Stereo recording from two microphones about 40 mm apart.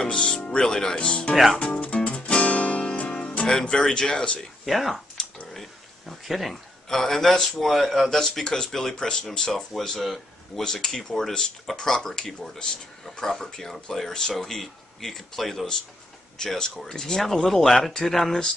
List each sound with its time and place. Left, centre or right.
0.0 s speech: centre
2.0 s music: left
3.1 s speech: left
4.6 s a man's voice: centre
5.5 s a sound: centre
6.9 s a man's voice: centre
8.1 s speech: centre
9.7 s a man's voice: centre
10.6 s speech: centre
16.3 s speech: centre